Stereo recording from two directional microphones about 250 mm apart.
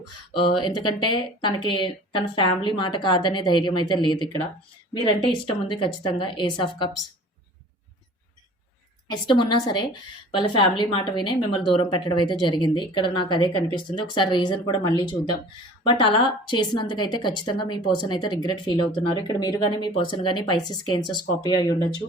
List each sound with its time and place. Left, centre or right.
0.3 s speech: centre
9.0 s a woman's voice: centre